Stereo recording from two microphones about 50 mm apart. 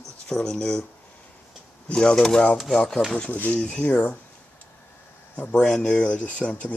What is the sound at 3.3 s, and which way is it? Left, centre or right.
Speech, left.